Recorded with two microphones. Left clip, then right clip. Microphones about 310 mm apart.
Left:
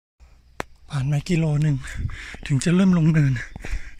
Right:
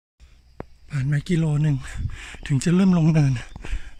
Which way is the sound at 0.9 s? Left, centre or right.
Centre.